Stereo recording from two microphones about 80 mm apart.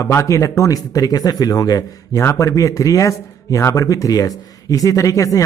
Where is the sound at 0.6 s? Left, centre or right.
Left.